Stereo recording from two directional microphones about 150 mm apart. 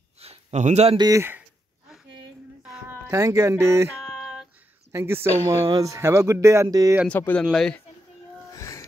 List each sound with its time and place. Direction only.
0.2 s a sound: 45° right (ahead or behind)
0.9 s speech: 25° right (ahead or behind)
1.9 s a sound: centre (ahead or behind)
2.9 s speech: 20° right (ahead or behind)
4.0 s female singing: centre (ahead or behind)
4.9 s speech: 15° right (ahead or behind)
7.1 s speech: 10° left (ahead or behind)
8.5 s music: 20° left (ahead or behind)